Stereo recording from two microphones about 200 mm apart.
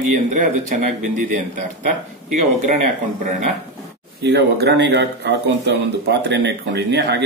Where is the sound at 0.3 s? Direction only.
40° right (ahead or behind).